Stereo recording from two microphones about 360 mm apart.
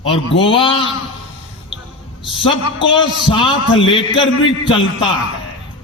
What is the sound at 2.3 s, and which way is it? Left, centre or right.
A man's voice, centre.